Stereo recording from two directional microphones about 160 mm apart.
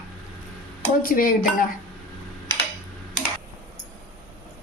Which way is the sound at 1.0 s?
60° left (ahead or behind).